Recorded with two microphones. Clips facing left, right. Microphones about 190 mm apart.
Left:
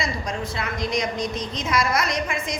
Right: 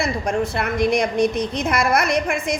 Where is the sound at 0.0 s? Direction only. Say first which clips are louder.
Right 7 dB; 60° right (ahead or behind).